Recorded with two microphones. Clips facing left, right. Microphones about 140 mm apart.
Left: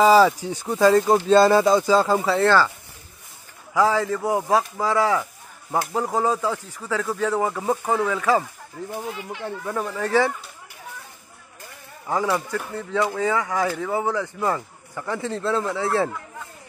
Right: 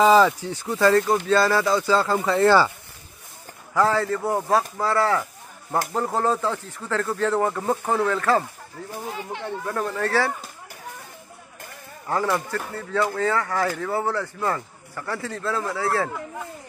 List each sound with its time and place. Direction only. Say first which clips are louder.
0.0 s speech: left 1 dB; 5° left (ahead or behind)
2.4 s speech: right 3 dB; 10° right (ahead or behind)
3.7 s speech: left 1 dB; 10° left (ahead or behind)
12.1 s speech: left 1 dB; 5° left (ahead or behind); by 16.1 s 25° left (ahead or behind)